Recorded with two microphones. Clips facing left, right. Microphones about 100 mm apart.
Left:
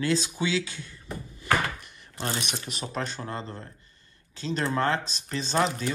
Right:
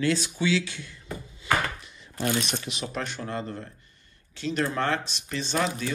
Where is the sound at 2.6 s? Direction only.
40° left (ahead or behind).